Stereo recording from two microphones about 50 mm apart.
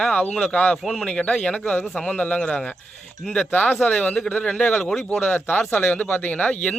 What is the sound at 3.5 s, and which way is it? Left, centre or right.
Speech, left.